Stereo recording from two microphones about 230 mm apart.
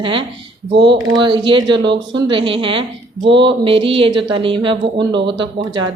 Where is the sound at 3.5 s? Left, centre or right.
Right.